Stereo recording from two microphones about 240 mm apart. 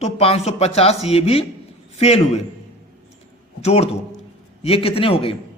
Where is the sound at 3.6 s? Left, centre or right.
Left.